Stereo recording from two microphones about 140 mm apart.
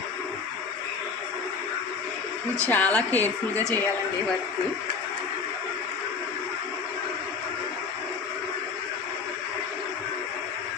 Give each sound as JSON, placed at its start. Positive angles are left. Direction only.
{"t": 2.6, "sound": "speech", "side_deg": 10}
{"t": 3.5, "sound": "speech", "side_deg": -20}